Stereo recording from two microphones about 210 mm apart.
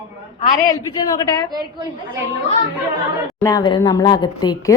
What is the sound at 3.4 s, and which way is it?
Speech, 20° left (ahead or behind).